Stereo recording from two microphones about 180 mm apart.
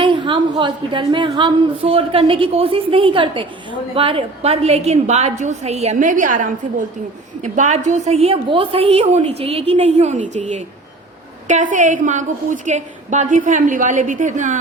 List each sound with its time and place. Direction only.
0.0 s a woman's voice: 30° right (ahead or behind); by 14.6 s 45° right (ahead or behind)